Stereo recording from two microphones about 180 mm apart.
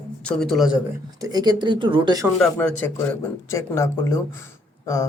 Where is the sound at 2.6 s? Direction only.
10° left (ahead or behind).